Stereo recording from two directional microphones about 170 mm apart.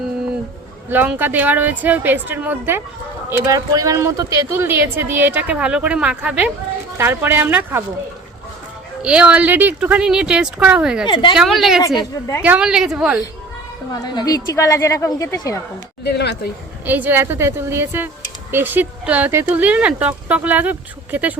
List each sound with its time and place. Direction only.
0.9 s speech: 10° right (ahead or behind)
9.0 s speech: 5° right (ahead or behind)
11.0 s a woman's voice: 30° left (ahead or behind)
11.3 s a woman's voice: centre (ahead or behind)
11.9 s a woman's voice: 20° left (ahead or behind)
12.4 s a woman's voice: 5° right (ahead or behind)
14.0 s a woman's voice: 20° left (ahead or behind)
16.0 s speech: 80° left
16.8 s speech: 10° right (ahead or behind)